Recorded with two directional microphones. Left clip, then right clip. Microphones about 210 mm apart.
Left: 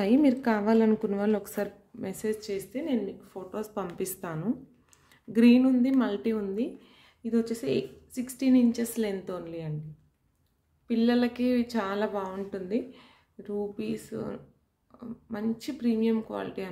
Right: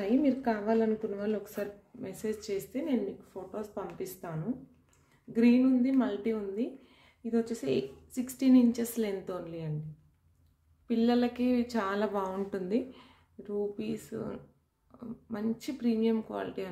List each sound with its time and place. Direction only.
0.0 s speech: 25° left (ahead or behind); by 3.0 s 5° left (ahead or behind)
3.3 s a woman's voice: 20° left (ahead or behind)
10.9 s a woman's voice: 10° left (ahead or behind)
13.4 s a woman's voice: 10° left (ahead or behind)